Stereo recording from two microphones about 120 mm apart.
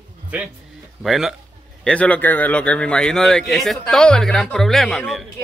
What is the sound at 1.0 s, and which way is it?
Speech, centre (ahead or behind).